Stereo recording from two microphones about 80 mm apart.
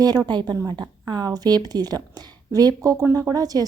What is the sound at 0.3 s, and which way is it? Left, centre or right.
A woman's voice, right.